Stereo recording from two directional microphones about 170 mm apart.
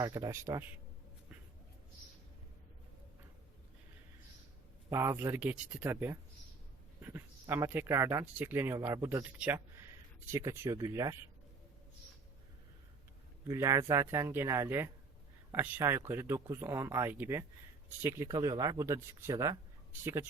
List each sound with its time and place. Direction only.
0.0 s speech: 20° right (ahead or behind)
4.9 s speech: 15° right (ahead or behind)
13.5 s speech: 20° right (ahead or behind)